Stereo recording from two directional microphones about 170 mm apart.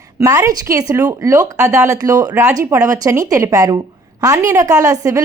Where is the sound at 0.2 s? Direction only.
20° right (ahead or behind).